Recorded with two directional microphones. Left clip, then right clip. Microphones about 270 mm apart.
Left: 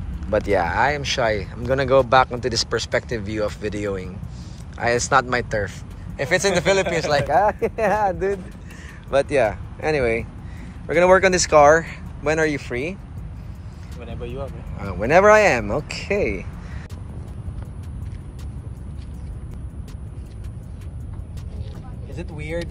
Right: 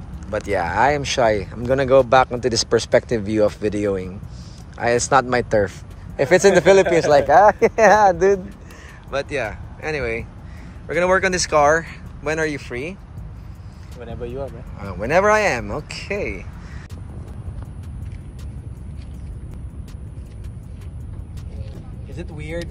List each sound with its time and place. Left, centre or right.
0.3 s speech: centre; by 8.4 s right
9.1 s speech: centre
14.0 s speech: right
14.8 s speech: centre
22.1 s vehicle: centre